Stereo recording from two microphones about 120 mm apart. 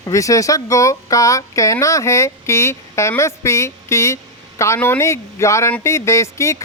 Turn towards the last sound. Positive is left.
turn(degrees=25)  # may be behind; listen again after turning